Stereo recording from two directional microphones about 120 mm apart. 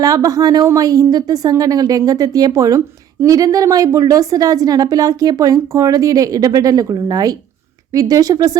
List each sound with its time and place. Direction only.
0.0 s speech: 30° right (ahead or behind)